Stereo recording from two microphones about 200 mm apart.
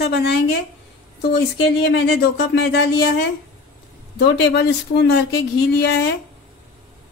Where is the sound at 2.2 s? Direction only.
55° left (ahead or behind).